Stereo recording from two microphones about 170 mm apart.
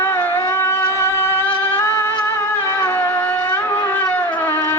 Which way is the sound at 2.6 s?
15° left (ahead or behind).